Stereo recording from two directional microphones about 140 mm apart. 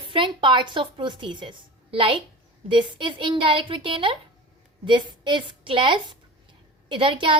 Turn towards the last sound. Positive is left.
turn(degrees=-35)  # may be behind; listen again after turning